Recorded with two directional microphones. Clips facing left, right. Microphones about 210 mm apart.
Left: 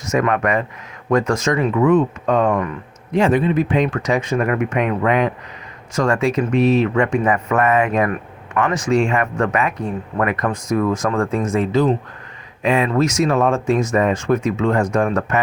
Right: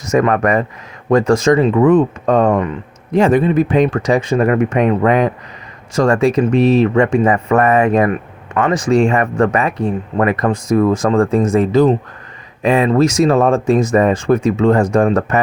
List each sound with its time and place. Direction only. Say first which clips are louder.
0.1 s speech: right 4 dB; 35° right (ahead or behind)